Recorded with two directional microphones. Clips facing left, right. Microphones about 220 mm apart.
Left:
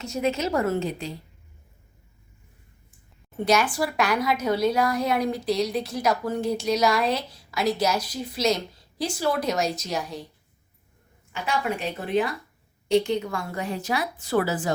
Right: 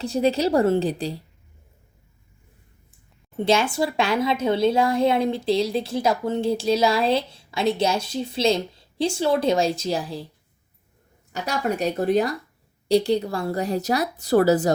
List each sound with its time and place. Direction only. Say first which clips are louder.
0.0 s a woman's voice: right 5 dB; 30° right (ahead or behind)
3.3 s a woman's voice: right 2 dB; 25° right (ahead or behind)
11.3 s a woman's voice: right 2 dB; 40° right (ahead or behind)